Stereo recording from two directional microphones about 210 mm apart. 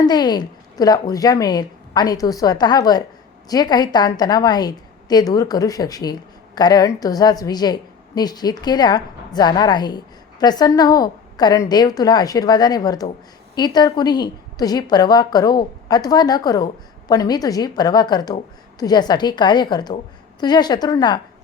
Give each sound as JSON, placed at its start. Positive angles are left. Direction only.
{"t": 0.0, "sound": "a woman's voice", "side_deg": 20}